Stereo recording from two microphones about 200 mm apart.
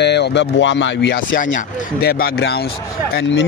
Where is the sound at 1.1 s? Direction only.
45° left (ahead or behind).